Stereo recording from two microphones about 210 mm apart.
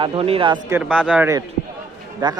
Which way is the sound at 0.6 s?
10° right (ahead or behind).